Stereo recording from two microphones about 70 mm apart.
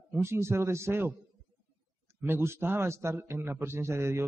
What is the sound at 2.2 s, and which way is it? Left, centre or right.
A man's voice, right.